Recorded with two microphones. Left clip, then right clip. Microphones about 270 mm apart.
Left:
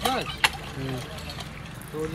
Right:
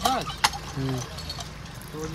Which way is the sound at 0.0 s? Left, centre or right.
Centre.